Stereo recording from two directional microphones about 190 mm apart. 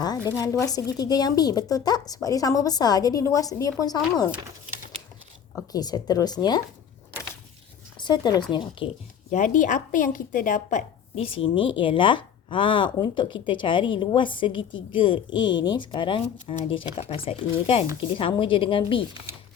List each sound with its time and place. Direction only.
0.6 s a woman's voice: 20° left (ahead or behind)
5.7 s a woman's voice: 20° left (ahead or behind)
7.9 s a woman's voice: 25° left (ahead or behind)
9.3 s a woman's voice: 40° left (ahead or behind); by 19.0 s 25° left (ahead or behind)